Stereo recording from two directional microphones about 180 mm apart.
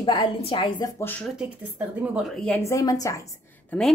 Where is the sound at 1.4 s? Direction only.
5° right (ahead or behind).